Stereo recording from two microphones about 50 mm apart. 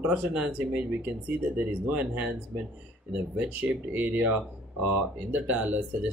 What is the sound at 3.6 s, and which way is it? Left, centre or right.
Speech, right.